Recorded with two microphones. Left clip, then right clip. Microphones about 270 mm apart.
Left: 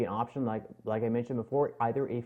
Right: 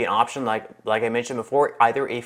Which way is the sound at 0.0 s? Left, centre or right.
Centre.